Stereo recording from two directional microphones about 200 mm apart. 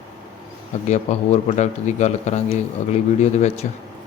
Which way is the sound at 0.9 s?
35° left (ahead or behind).